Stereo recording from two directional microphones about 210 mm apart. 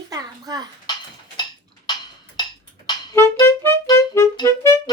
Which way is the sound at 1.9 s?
20° left (ahead or behind).